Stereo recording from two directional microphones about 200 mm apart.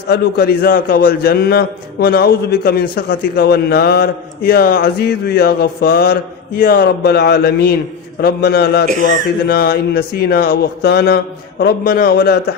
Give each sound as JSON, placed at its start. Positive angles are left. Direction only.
{"t": 0.1, "sound": "a man's voice", "side_deg": 55}